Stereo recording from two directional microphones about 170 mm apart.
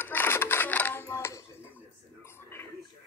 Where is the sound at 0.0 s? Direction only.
15° left (ahead or behind).